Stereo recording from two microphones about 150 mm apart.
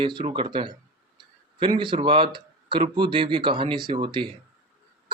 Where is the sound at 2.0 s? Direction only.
35° right (ahead or behind).